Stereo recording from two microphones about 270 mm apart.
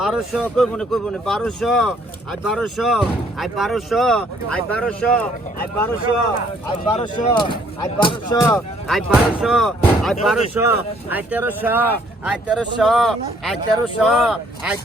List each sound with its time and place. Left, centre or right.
0.0 s speech: centre
6.9 s speech: left; by 14.8 s centre